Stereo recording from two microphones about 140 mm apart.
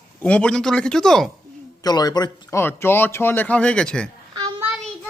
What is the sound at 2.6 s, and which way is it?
Speech, 15° left (ahead or behind).